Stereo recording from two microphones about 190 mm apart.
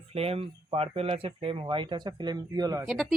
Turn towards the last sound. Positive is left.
turn(degrees=0)  # may be behind; listen again after turning